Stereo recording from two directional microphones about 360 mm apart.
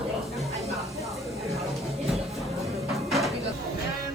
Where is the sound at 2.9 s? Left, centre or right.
Centre.